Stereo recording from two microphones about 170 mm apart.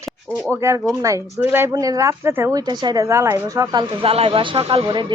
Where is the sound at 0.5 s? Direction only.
15° right (ahead or behind).